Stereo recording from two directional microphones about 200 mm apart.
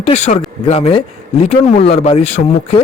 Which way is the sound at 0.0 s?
35° left (ahead or behind).